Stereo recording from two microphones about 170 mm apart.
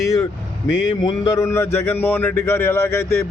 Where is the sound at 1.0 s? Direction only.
20° left (ahead or behind).